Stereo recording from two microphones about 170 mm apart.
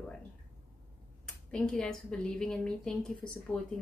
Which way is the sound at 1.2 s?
5° left (ahead or behind).